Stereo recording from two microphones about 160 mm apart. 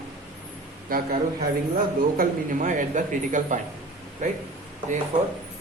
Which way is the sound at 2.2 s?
55° right (ahead or behind).